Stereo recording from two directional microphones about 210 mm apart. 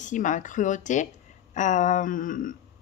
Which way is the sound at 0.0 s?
35° left (ahead or behind).